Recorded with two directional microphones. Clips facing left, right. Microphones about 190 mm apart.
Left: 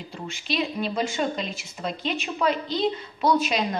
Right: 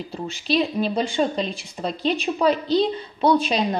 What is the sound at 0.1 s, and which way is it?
Speech, 35° right (ahead or behind).